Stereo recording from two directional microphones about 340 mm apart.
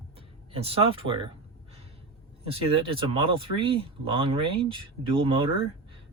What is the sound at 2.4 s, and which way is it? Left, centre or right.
Speech, centre.